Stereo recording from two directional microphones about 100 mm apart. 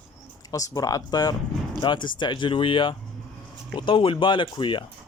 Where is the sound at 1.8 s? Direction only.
50° left (ahead or behind).